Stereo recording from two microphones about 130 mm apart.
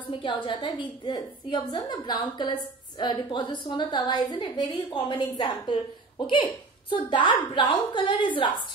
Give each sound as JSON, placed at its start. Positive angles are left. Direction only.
{"t": 0.2, "sound": "a woman's voice", "side_deg": 40}